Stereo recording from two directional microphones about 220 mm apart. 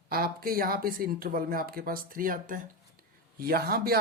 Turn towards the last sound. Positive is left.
turn(degrees=-45)  # may be behind; listen again after turning